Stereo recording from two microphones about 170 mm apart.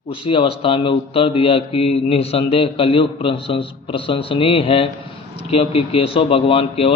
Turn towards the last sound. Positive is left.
turn(degrees=35)  # may be behind; listen again after turning